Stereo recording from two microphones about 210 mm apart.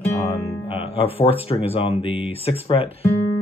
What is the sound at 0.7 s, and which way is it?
Speech, 25° left (ahead or behind).